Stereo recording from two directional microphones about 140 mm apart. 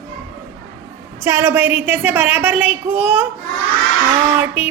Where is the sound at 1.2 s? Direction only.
15° right (ahead or behind).